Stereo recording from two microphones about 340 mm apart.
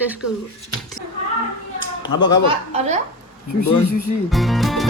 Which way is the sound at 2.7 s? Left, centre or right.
Centre.